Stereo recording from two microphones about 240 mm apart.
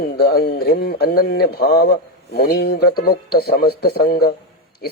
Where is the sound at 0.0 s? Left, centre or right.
Left.